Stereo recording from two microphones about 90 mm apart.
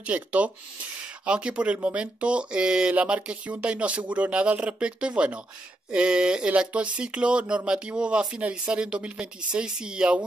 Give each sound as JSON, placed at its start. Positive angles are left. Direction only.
{"t": 0.0, "sound": "speech", "side_deg": -15}